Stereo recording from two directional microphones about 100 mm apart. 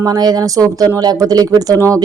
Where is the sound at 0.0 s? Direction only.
40° right (ahead or behind).